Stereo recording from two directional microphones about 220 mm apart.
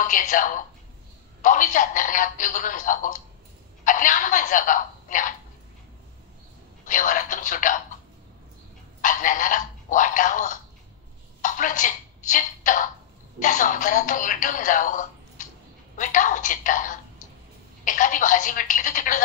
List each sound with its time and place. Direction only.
0.0 s speech: 35° left (ahead or behind)
6.9 s speech: 35° left (ahead or behind)
9.0 s speech: 35° left (ahead or behind)